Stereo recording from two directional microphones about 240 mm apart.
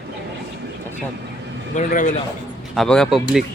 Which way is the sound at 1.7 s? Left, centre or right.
Left.